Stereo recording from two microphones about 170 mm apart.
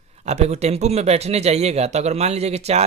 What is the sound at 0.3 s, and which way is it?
Speech, 40° right (ahead or behind).